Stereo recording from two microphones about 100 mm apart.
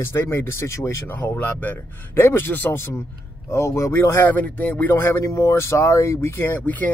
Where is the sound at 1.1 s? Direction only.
20° left (ahead or behind).